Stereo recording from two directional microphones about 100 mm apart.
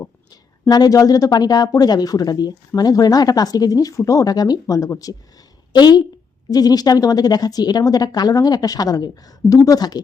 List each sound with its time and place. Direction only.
0.7 s a woman's voice: 40° left (ahead or behind)